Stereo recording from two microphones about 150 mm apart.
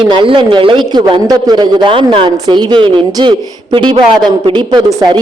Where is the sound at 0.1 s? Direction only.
35° right (ahead or behind).